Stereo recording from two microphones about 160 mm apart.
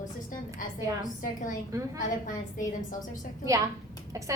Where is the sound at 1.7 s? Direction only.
20° right (ahead or behind).